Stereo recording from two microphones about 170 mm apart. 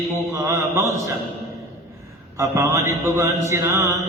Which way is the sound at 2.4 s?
15° right (ahead or behind).